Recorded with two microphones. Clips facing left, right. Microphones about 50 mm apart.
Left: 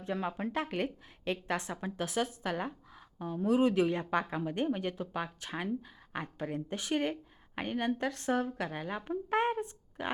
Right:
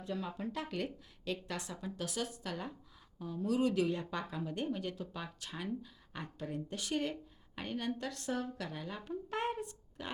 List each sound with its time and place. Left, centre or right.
0.0 s speech: left
3.4 s speech: left